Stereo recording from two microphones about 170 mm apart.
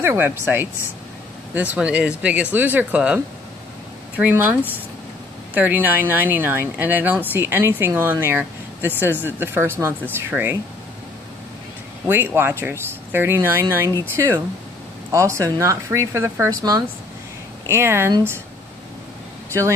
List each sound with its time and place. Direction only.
0.0 s speech: 15° right (ahead or behind)
4.2 s speech: 10° right (ahead or behind)
12.1 s speech: 10° right (ahead or behind)